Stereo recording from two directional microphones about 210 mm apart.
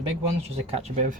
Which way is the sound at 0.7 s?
35° right (ahead or behind).